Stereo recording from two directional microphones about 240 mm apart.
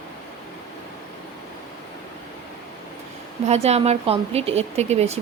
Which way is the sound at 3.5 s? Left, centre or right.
Right.